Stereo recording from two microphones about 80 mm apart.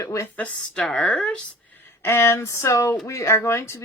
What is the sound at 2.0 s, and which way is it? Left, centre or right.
Speech, left.